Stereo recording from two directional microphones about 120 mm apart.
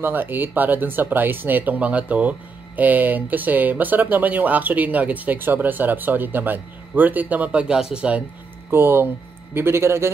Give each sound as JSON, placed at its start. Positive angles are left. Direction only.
{"t": 0.0, "sound": "speech", "side_deg": -15}
{"t": 8.6, "sound": "speech", "side_deg": -20}